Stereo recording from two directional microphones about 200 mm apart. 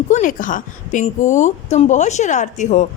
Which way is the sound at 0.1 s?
40° left (ahead or behind).